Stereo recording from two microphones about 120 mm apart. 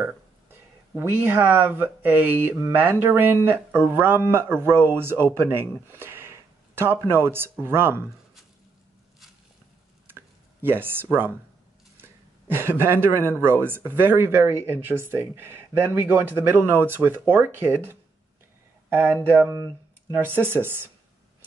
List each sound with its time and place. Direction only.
0.0 s speech: 20° right (ahead or behind)
10.0 s a sound: 20° right (ahead or behind)
12.0 s speech: 20° right (ahead or behind)
19.5 s speech: 30° right (ahead or behind)
20.2 s speech: 20° right (ahead or behind)